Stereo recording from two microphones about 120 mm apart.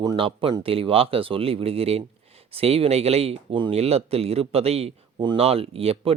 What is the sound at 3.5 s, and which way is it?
Speech, 40° right (ahead or behind).